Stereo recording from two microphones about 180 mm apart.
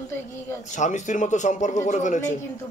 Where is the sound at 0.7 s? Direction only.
40° left (ahead or behind).